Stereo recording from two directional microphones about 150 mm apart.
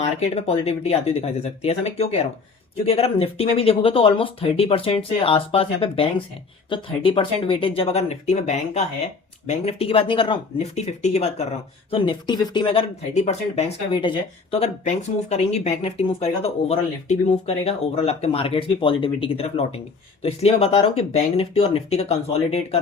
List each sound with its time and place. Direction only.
0.2 s speech: 45° left (ahead or behind)
11.9 s speech: 35° left (ahead or behind)
13.1 s speech: 45° left (ahead or behind)